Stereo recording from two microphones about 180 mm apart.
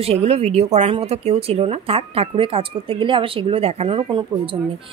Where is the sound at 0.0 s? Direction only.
35° right (ahead or behind).